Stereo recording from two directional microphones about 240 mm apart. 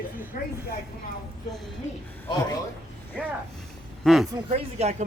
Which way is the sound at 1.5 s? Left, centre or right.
Centre.